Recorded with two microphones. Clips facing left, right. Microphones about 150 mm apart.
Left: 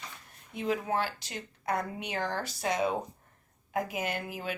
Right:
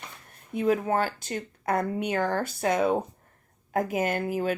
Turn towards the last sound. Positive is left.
turn(degrees=-45)  # may be behind; listen again after turning